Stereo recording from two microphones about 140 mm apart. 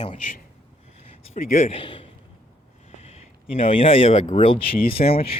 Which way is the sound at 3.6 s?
40° left (ahead or behind).